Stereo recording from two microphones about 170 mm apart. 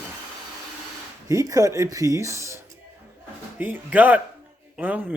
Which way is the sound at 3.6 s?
10° right (ahead or behind).